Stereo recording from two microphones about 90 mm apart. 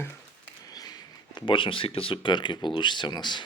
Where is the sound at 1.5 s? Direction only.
75° left (ahead or behind).